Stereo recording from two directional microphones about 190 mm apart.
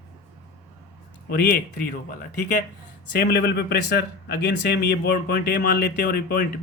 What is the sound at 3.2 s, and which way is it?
Speech, 60° left (ahead or behind).